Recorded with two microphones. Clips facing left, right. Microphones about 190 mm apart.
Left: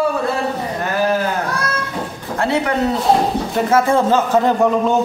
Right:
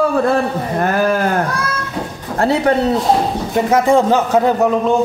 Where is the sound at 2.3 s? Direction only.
40° right (ahead or behind).